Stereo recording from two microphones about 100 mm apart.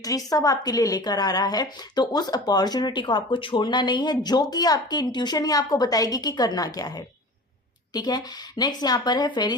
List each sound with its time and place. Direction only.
0.0 s a woman's voice: 35° left (ahead or behind)